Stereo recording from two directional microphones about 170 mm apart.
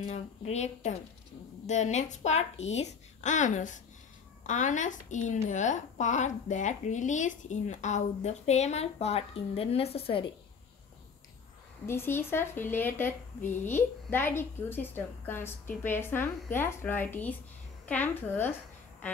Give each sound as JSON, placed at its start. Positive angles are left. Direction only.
{"t": 0.0, "sound": "a woman's voice", "side_deg": 40}
{"t": 11.8, "sound": "speech", "side_deg": 15}